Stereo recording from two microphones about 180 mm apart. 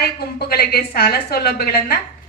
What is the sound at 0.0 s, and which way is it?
Speech, 60° left (ahead or behind).